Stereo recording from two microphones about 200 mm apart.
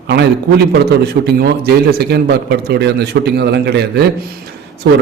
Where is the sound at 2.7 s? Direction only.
55° right (ahead or behind).